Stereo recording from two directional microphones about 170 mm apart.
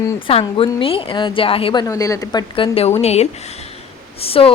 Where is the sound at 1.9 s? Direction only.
20° left (ahead or behind).